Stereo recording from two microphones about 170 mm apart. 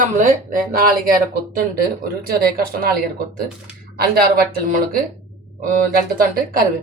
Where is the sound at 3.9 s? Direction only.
60° right (ahead or behind).